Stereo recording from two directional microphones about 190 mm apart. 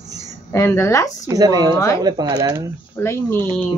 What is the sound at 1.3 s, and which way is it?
Speech, 20° right (ahead or behind).